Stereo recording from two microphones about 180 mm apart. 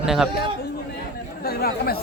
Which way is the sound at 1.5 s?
55° left (ahead or behind).